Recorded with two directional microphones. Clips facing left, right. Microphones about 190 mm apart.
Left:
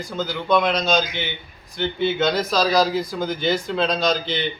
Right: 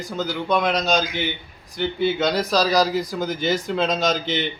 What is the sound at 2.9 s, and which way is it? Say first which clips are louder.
A man's voice: even; 40° right (ahead or behind).